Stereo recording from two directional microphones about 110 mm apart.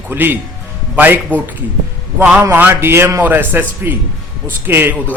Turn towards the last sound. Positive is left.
turn(degrees=-20)  # may be behind; listen again after turning